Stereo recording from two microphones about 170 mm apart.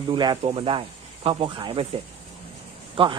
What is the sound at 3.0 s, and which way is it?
Speech, 30° right (ahead or behind).